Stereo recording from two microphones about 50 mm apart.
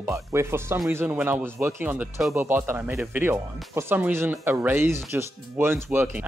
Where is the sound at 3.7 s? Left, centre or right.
Right.